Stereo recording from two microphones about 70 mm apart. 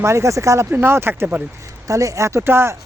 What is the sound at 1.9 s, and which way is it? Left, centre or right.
Speech, right.